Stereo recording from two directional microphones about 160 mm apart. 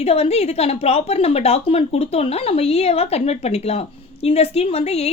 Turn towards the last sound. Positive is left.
turn(degrees=40)  # may be behind; listen again after turning